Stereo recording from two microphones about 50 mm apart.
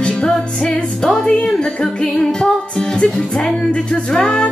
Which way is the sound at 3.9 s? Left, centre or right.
Centre.